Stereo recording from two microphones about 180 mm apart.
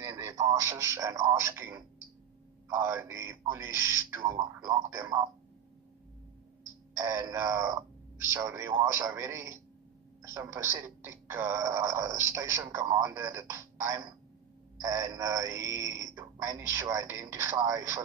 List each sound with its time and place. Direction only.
0.0 s a man's voice: 15° right (ahead or behind)
7.0 s speech: 15° right (ahead or behind)